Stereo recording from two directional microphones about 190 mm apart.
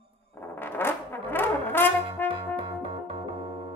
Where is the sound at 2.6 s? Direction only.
30° right (ahead or behind).